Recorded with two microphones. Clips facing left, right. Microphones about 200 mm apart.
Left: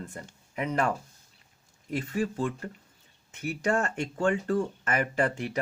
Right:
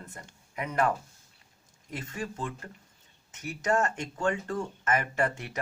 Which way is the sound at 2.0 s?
35° left (ahead or behind).